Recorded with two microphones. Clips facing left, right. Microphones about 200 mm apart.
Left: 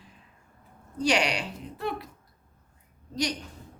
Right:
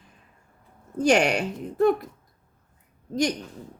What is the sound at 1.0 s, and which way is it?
A woman's voice, 50° right (ahead or behind).